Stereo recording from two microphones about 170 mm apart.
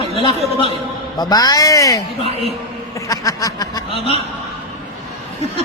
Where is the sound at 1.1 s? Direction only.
20° left (ahead or behind).